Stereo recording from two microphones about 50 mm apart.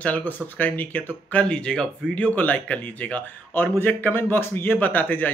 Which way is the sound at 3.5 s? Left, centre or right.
Left.